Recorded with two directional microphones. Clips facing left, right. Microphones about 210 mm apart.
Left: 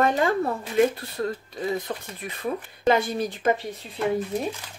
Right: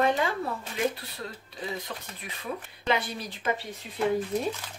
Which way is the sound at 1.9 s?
45° left (ahead or behind).